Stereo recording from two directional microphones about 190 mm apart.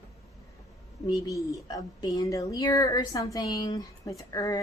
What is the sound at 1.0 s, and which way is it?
Speech, 15° left (ahead or behind).